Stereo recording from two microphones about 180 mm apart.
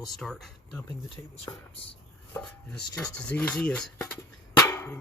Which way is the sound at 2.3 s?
5° left (ahead or behind).